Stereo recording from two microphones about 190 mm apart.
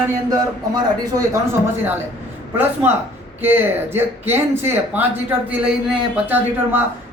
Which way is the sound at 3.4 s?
10° right (ahead or behind).